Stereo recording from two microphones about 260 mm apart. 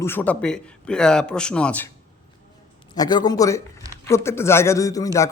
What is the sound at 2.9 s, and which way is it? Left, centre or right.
A man's voice, centre.